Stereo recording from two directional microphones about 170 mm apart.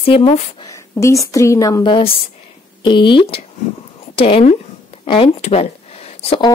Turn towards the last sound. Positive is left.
turn(degrees=35)  # may be behind; listen again after turning